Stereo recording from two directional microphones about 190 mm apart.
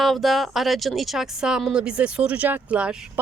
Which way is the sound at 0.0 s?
Centre (ahead or behind).